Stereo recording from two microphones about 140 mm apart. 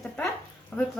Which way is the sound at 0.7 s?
10° left (ahead or behind).